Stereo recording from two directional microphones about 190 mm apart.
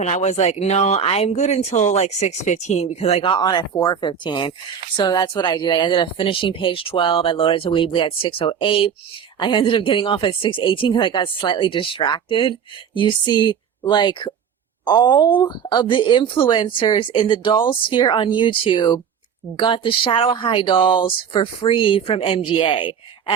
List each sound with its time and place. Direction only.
0.0 s speech: 35° left (ahead or behind)